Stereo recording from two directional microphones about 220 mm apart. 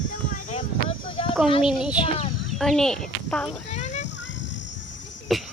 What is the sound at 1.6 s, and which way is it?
A child's voice, 5° right (ahead or behind).